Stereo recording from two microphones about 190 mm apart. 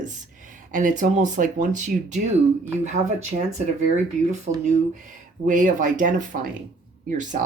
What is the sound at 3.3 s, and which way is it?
Speech, 40° right (ahead or behind).